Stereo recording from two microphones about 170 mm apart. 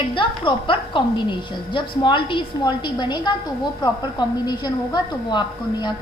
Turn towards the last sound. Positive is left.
turn(degrees=25)  # may be behind; listen again after turning